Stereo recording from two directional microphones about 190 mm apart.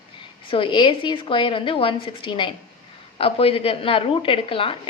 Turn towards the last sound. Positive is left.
turn(degrees=25)  # may be behind; listen again after turning